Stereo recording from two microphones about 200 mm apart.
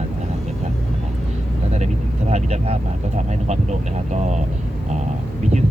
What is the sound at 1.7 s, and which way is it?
Speech, 35° right (ahead or behind).